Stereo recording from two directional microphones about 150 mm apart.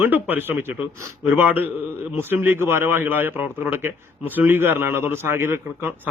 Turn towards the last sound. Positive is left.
turn(degrees=-15)  # may be behind; listen again after turning